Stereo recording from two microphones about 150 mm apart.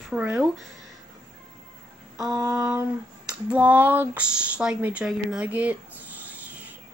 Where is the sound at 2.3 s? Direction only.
20° right (ahead or behind).